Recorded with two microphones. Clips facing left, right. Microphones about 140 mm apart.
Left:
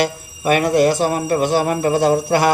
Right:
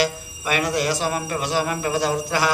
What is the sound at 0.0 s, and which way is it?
Speech, 55° left (ahead or behind).